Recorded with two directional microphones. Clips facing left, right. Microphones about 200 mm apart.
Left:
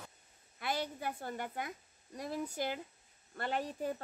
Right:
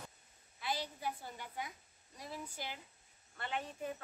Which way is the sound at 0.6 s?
55° left (ahead or behind).